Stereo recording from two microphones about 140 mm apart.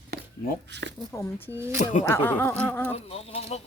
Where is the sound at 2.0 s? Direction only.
15° left (ahead or behind).